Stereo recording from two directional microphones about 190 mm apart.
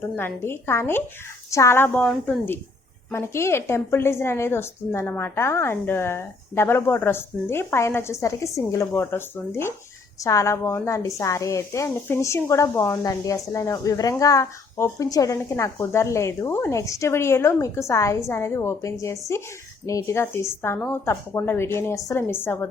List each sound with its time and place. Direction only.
0.2 s a woman's voice: 10° left (ahead or behind)